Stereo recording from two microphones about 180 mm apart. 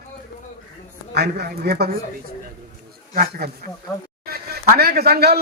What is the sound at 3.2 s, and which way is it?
A man's voice, 60° right (ahead or behind).